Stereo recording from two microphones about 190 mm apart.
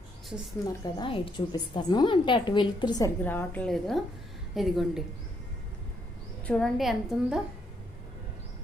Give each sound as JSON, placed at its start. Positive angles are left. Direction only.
{"t": 0.9, "sound": "a woman's voice", "side_deg": 25}
{"t": 3.2, "sound": "a woman's voice", "side_deg": 10}
{"t": 6.4, "sound": "a woman's voice", "side_deg": 5}